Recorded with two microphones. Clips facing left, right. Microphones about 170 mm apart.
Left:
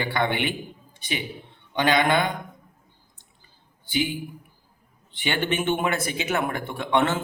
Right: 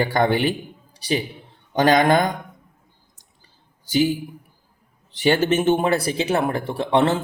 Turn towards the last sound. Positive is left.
turn(degrees=-35)  # may be behind; listen again after turning